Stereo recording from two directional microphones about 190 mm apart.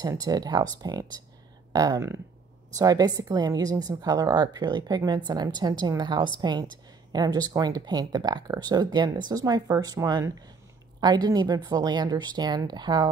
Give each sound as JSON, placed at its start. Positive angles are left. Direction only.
{"t": 0.0, "sound": "a woman's voice", "side_deg": -20}